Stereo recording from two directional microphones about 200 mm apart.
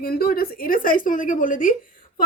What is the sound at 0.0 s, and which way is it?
A woman's voice, 50° left (ahead or behind).